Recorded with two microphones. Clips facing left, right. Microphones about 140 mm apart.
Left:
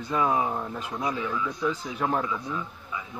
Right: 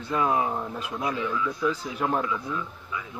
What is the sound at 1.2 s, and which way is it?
Speech, 20° left (ahead or behind).